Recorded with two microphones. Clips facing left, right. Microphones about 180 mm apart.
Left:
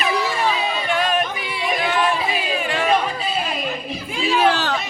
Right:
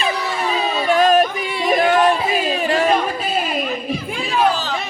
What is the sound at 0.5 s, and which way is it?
Yodeling, 40° right (ahead or behind).